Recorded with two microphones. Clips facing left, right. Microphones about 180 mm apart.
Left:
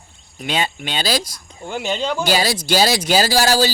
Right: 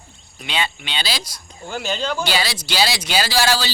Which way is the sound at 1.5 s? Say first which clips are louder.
Left 2 dB; 20° left (ahead or behind).